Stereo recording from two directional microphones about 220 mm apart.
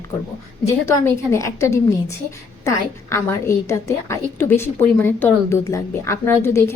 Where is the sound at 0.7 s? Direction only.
10° left (ahead or behind).